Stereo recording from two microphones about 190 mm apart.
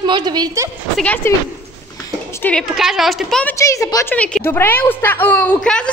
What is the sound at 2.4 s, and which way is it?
A woman's voice, centre (ahead or behind).